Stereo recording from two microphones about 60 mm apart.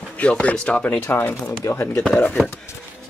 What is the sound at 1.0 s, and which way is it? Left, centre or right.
Speech, left.